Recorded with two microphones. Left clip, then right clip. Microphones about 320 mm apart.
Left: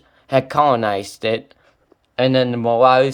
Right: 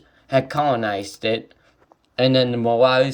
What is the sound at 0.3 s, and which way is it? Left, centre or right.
Speech, centre.